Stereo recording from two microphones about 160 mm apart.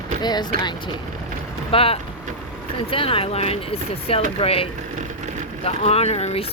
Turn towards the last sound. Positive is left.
turn(degrees=40)  # may be behind; listen again after turning